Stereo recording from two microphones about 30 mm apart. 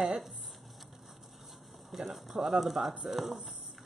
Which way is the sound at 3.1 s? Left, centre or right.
Centre.